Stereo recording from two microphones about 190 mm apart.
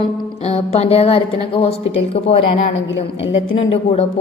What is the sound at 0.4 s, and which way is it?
Speech, 35° left (ahead or behind).